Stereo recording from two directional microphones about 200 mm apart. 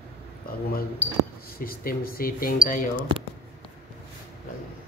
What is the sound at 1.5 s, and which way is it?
Speech, 50° left (ahead or behind).